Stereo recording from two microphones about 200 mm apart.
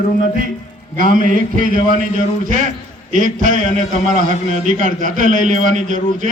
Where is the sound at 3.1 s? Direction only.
40° right (ahead or behind).